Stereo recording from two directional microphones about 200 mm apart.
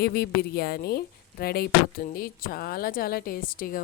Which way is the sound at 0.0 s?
50° left (ahead or behind).